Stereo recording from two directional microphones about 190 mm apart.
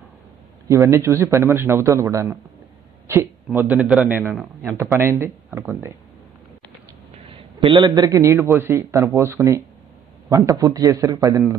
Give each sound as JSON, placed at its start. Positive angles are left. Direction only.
{"t": 0.7, "sound": "a man's voice", "side_deg": -15}
{"t": 7.6, "sound": "a man's voice", "side_deg": -25}